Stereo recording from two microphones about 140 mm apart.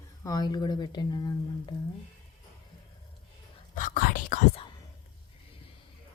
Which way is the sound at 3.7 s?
75° left (ahead or behind).